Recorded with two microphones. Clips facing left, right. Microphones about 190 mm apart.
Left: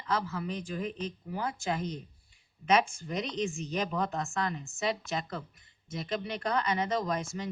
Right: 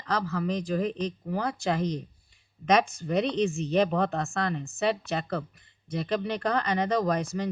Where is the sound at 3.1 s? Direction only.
65° right (ahead or behind).